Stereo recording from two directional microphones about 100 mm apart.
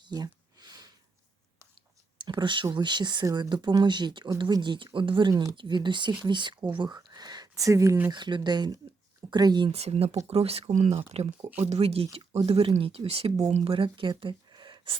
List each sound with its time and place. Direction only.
0.1 s a sound: 45° right (ahead or behind)
2.1 s a sound: 50° right (ahead or behind)
2.7 s speech: 50° right (ahead or behind)
5.3 s speech: 30° right (ahead or behind)
5.5 s speech: 50° right (ahead or behind)
7.5 s speech: 35° right (ahead or behind)
8.1 s speech: 50° right (ahead or behind)
9.7 s speech: 90° right
10.2 s speech: 80° right
12.5 s speech: 80° right; by 14.9 s 50° right (ahead or behind)